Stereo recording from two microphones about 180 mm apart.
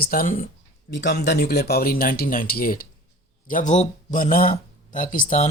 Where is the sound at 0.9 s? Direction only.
70° left (ahead or behind).